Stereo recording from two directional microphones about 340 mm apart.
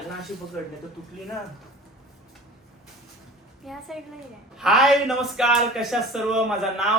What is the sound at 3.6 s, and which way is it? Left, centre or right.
Speech, centre.